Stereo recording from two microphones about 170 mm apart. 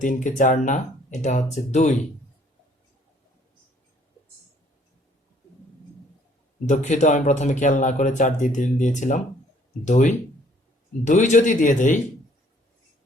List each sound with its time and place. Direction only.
0.0 s speech: 50° left (ahead or behind)
6.7 s speech: 40° left (ahead or behind)